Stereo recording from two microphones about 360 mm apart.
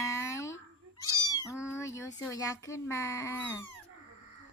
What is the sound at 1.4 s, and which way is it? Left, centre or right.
Speech, centre.